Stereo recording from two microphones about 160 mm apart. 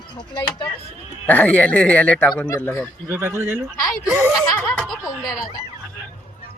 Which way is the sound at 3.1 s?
15° right (ahead or behind).